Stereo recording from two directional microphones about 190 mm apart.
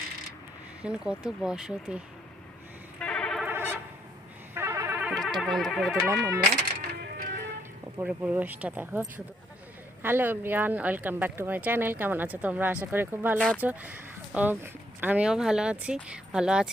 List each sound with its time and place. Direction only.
0.8 s speech: 5° right (ahead or behind)
3.0 s a sound: 5° left (ahead or behind)
3.4 s a sound: 10° right (ahead or behind)
4.5 s music: 10° right (ahead or behind)
5.4 s speech: centre (ahead or behind)
6.1 s speech: 15° right (ahead or behind)
7.0 s music: 55° right (ahead or behind)
7.9 s speech: 10° right (ahead or behind)